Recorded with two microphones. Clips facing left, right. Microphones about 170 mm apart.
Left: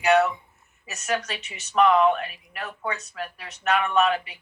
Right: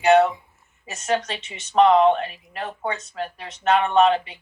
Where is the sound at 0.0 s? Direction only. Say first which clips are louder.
Right 4 dB; 30° right (ahead or behind).